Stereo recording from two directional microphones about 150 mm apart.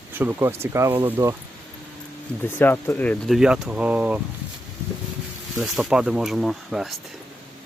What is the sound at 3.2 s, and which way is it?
Speech, 5° right (ahead or behind).